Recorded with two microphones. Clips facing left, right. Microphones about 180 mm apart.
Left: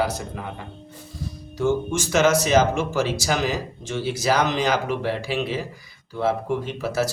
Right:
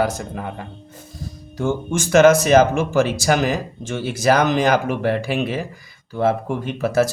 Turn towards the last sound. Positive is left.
turn(degrees=-50)  # may be behind; listen again after turning